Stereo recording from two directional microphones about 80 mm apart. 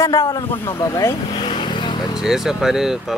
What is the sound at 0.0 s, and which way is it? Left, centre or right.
A man's voice, left.